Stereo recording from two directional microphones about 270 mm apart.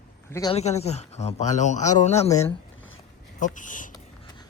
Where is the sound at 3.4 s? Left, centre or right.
Left.